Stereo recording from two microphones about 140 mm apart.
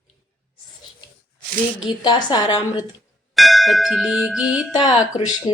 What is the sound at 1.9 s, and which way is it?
Speech, 30° left (ahead or behind).